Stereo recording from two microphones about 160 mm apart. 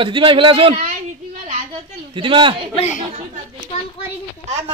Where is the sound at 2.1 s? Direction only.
30° right (ahead or behind).